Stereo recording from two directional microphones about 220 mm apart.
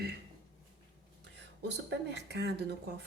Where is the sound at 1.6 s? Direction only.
50° right (ahead or behind).